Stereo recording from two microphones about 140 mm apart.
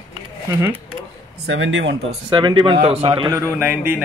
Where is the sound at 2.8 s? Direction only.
45° right (ahead or behind).